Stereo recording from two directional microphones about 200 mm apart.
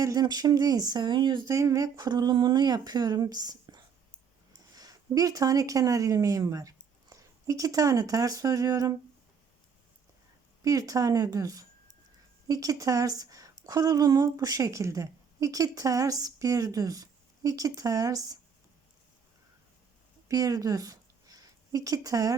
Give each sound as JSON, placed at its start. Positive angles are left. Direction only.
{"t": 0.0, "sound": "speech", "side_deg": -20}
{"t": 10.6, "sound": "a woman's voice", "side_deg": -15}
{"t": 20.2, "sound": "a sound", "side_deg": -20}